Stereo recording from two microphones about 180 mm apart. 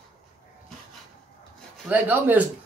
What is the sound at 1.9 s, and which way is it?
Speech, 10° right (ahead or behind).